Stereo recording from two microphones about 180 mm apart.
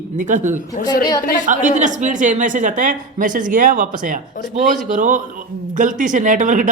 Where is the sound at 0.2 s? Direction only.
45° right (ahead or behind).